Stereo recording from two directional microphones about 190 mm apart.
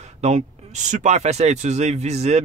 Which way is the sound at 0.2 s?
35° right (ahead or behind).